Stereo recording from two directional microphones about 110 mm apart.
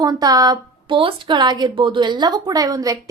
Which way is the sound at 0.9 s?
50° right (ahead or behind).